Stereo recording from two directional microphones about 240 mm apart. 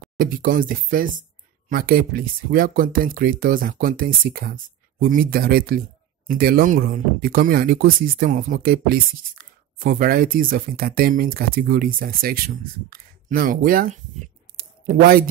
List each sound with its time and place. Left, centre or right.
0.2 s speech: right